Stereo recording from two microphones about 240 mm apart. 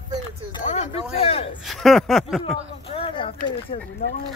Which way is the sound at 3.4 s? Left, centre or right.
Left.